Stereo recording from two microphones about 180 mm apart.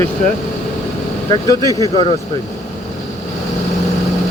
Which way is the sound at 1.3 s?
20° left (ahead or behind).